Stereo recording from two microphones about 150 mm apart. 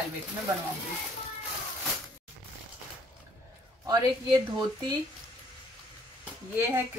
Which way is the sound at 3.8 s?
30° right (ahead or behind).